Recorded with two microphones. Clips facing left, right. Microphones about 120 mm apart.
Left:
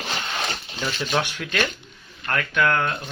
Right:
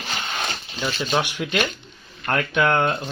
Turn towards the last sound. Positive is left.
turn(degrees=-25)  # may be behind; listen again after turning